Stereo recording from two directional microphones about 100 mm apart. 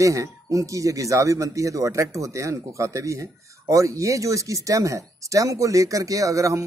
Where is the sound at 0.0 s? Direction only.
35° right (ahead or behind).